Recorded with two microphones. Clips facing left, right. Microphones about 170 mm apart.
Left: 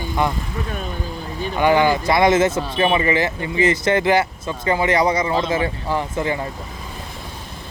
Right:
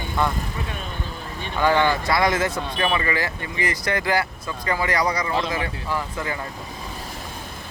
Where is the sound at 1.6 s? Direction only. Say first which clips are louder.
Left 3 dB; 15° left (ahead or behind).